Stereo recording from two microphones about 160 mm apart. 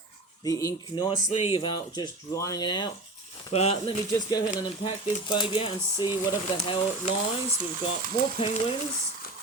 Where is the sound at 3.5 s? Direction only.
40° left (ahead or behind).